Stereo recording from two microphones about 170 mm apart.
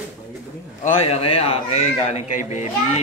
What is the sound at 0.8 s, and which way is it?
A man's voice, 35° left (ahead or behind).